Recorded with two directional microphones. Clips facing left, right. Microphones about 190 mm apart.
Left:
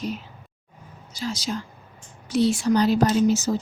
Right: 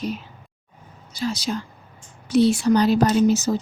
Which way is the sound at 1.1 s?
60° right (ahead or behind).